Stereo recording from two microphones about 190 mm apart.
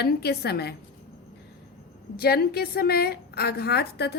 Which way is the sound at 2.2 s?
55° left (ahead or behind).